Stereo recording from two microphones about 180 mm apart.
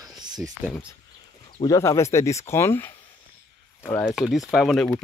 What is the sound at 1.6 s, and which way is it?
Speech, 20° left (ahead or behind).